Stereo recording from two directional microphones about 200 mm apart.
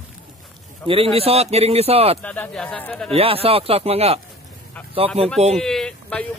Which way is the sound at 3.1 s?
30° right (ahead or behind).